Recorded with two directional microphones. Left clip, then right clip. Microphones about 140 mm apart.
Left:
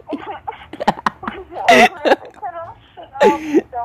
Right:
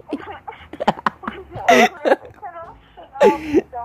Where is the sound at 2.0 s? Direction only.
10° left (ahead or behind).